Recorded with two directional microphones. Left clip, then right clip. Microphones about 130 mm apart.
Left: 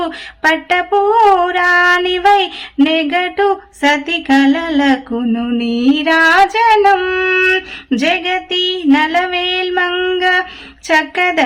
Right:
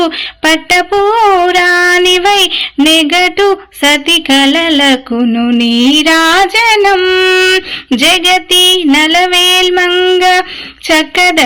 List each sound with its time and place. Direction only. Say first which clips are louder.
0.9 s a sound: left 1 dB; 25° right (ahead or behind)
2.8 s speech: right 6 dB; 35° right (ahead or behind)
10.2 s speech: right 5 dB; 35° right (ahead or behind)